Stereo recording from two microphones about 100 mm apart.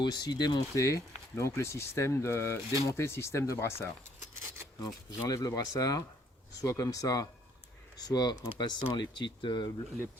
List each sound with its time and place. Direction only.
0.0 s speech: 45° left (ahead or behind); by 3.8 s 30° left (ahead or behind)
5.1 s speech: 35° left (ahead or behind)